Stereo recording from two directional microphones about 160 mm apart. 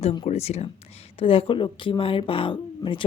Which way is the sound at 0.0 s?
35° left (ahead or behind).